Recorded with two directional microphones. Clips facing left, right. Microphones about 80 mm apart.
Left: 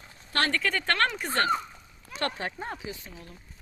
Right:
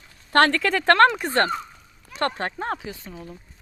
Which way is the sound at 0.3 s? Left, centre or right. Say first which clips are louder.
Right 9 dB; right.